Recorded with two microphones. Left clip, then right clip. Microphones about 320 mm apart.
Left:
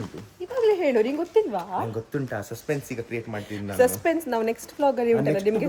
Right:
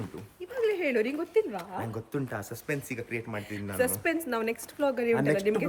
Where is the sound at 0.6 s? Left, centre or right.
Centre.